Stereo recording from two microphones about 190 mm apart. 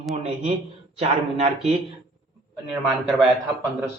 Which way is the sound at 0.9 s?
35° right (ahead or behind).